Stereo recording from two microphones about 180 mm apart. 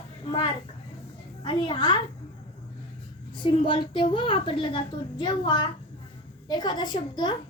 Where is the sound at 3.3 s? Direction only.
25° left (ahead or behind).